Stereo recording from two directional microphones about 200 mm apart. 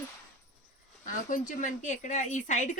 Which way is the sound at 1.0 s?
40° left (ahead or behind).